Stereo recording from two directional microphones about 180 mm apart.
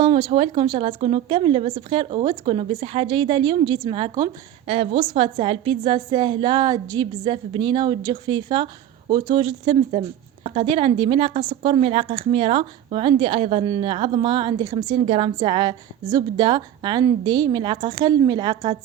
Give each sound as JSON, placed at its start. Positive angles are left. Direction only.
{"t": 0.0, "sound": "a woman's voice", "side_deg": -30}